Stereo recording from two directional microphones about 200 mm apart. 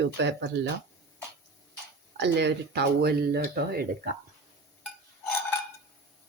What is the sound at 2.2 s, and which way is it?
Speech, 60° right (ahead or behind).